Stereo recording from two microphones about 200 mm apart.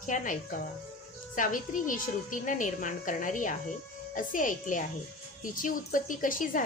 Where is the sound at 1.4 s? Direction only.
40° left (ahead or behind).